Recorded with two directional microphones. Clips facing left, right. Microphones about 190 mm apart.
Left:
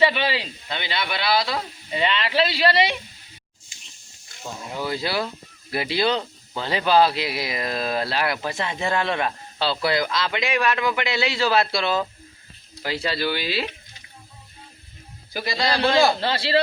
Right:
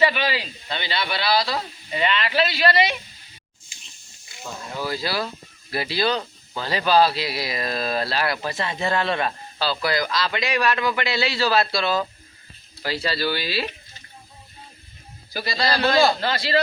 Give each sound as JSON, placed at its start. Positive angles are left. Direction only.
{"t": 0.0, "sound": "a sound", "side_deg": 25}
{"t": 0.7, "sound": "a man's voice", "side_deg": 15}
{"t": 4.7, "sound": "a man's voice", "side_deg": 20}
{"t": 15.3, "sound": "a man's voice", "side_deg": 20}
{"t": 16.2, "sound": "speech", "side_deg": 30}